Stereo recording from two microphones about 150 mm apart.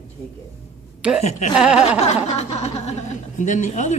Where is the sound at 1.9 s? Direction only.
45° left (ahead or behind).